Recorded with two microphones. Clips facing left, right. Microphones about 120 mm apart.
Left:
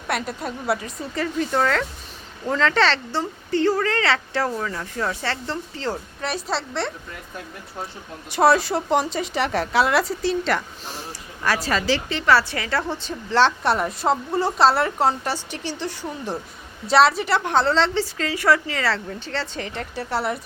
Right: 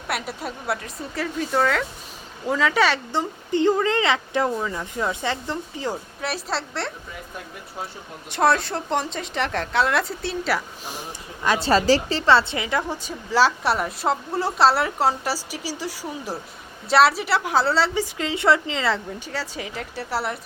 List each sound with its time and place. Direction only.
0.1 s a woman's voice: 5° right (ahead or behind)
6.2 s a woman's voice: centre (ahead or behind)
8.3 s a woman's voice: 5° left (ahead or behind)
11.4 s a woman's voice: 20° right (ahead or behind)
11.7 s a woman's voice: 35° right (ahead or behind); by 20.4 s centre (ahead or behind)